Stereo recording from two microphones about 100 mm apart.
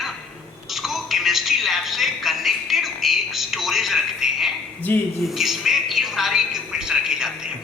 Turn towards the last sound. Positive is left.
turn(degrees=-5)  # may be behind; listen again after turning